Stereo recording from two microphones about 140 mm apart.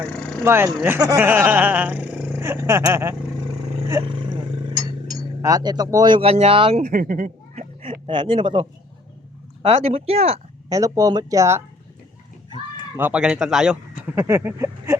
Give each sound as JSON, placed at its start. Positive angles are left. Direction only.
{"t": 0.0, "sound": "a sound", "side_deg": 10}
{"t": 0.4, "sound": "speech", "side_deg": -15}
{"t": 1.2, "sound": "speech", "side_deg": -10}
{"t": 5.4, "sound": "speech", "side_deg": -25}
{"t": 6.7, "sound": "speech", "side_deg": -80}
{"t": 7.5, "sound": "a sound", "side_deg": -45}
{"t": 8.0, "sound": "speech", "side_deg": -35}
{"t": 9.6, "sound": "speech", "side_deg": -45}
{"t": 10.7, "sound": "speech", "side_deg": -25}
{"t": 13.0, "sound": "speech", "side_deg": -10}
{"t": 14.2, "sound": "speech", "side_deg": -20}